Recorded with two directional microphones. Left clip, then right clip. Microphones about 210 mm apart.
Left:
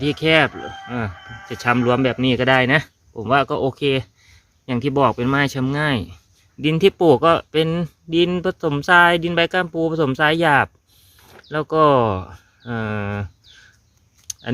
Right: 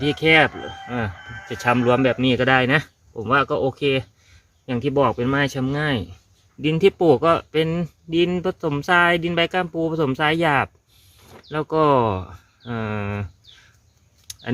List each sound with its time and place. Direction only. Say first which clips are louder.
0.0 s speech: even; 20° left (ahead or behind)